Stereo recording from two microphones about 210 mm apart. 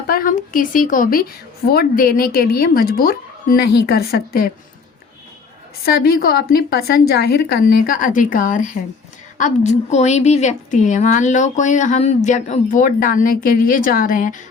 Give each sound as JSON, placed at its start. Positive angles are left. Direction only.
{"t": 0.1, "sound": "a woman's voice", "side_deg": 40}
{"t": 5.8, "sound": "a woman's voice", "side_deg": 50}